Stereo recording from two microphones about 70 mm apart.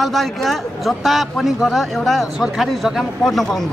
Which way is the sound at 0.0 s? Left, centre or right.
Centre.